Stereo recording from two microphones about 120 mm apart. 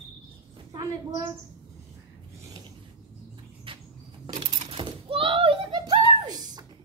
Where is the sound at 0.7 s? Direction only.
30° right (ahead or behind).